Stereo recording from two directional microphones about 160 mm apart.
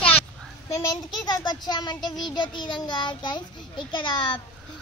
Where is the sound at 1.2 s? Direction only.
25° left (ahead or behind).